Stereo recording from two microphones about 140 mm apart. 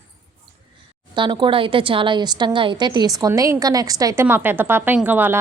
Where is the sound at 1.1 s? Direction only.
35° right (ahead or behind).